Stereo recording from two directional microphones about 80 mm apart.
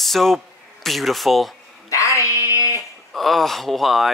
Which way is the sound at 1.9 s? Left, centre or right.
Left.